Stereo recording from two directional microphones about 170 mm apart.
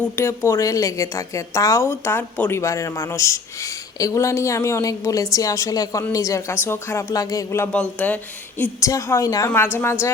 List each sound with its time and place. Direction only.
0.0 s a woman's voice: 15° left (ahead or behind)